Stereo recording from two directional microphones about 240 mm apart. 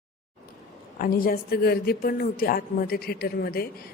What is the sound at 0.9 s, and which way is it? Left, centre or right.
A woman's voice, left.